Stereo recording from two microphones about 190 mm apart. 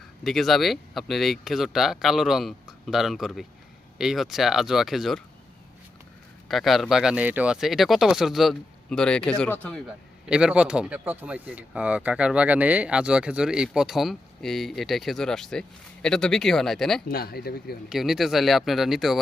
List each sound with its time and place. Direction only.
0.3 s speech: centre (ahead or behind)
6.5 s speech: centre (ahead or behind)
17.1 s speech: 50° left (ahead or behind)
17.8 s speech: centre (ahead or behind)